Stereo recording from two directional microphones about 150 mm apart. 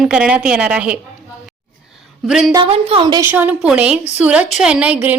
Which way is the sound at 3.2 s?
10° right (ahead or behind).